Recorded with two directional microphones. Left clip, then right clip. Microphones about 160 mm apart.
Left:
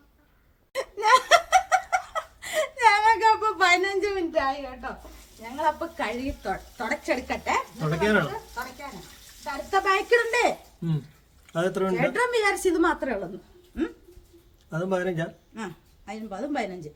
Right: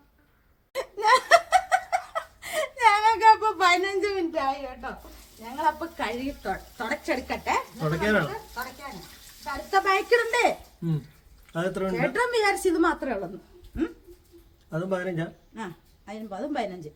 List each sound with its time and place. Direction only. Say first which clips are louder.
0.7 s laughter: left 1 dB; 15° right (ahead or behind)
5.4 s a woman's voice: even; 15° right (ahead or behind)
9.4 s a woman's voice: right 1 dB; 10° right (ahead or behind)
10.8 s speech: even; 15° left (ahead or behind)
11.9 s a woman's voice: right 1 dB; 15° right (ahead or behind)
13.7 s a sound: even; 15° right (ahead or behind)
14.7 s speech: left 2 dB; 10° left (ahead or behind)
15.5 s a woman's voice: even; 5° right (ahead or behind)